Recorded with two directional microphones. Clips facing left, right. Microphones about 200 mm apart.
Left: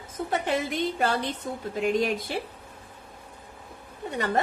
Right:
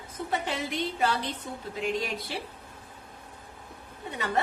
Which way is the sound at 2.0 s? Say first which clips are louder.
Left 7 dB; 50° left (ahead or behind).